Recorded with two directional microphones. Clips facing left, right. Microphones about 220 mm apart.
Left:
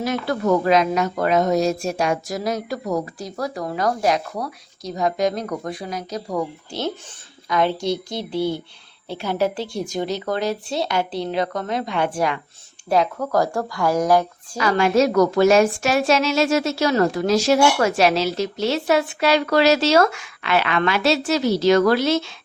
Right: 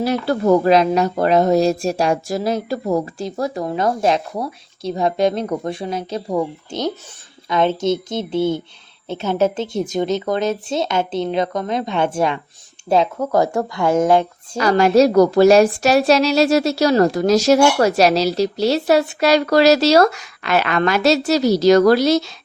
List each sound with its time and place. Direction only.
0.0 s speech: 35° right (ahead or behind)
14.6 s a woman's voice: 40° right (ahead or behind)